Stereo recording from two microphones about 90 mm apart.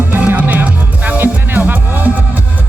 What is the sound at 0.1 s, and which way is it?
Music, 15° right (ahead or behind).